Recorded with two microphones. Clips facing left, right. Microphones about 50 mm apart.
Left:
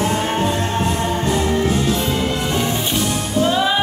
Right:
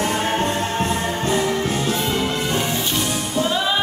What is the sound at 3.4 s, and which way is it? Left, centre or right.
Music, centre.